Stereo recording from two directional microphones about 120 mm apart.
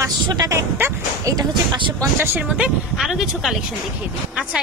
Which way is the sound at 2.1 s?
15° right (ahead or behind).